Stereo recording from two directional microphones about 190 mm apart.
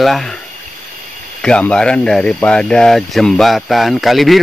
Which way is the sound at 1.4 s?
5° left (ahead or behind).